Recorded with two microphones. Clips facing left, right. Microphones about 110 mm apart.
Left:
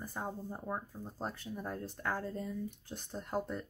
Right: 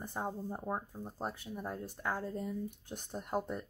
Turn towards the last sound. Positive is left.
turn(degrees=-15)  # may be behind; listen again after turning